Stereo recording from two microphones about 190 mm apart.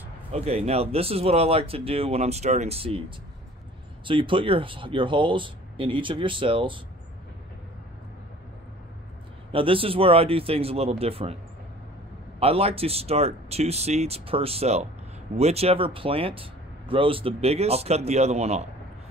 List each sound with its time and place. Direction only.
0.3 s speech: 30° right (ahead or behind)
4.0 s speech: 25° right (ahead or behind)
9.5 s speech: 30° right (ahead or behind)
12.4 s speech: 30° right (ahead or behind)